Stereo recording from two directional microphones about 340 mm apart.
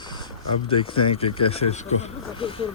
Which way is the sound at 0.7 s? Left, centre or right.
Centre.